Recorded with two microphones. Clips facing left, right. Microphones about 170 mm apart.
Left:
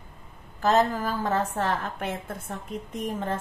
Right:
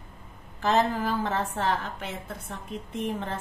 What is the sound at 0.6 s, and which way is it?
A woman's voice, 40° left (ahead or behind).